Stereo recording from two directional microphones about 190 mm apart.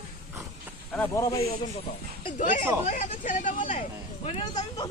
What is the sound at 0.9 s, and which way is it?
Speech, 10° left (ahead or behind).